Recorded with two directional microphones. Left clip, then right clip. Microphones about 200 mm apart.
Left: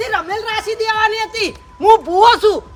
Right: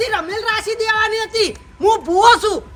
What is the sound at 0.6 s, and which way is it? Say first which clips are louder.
A woman's voice: left 3 dB; 15° left (ahead or behind).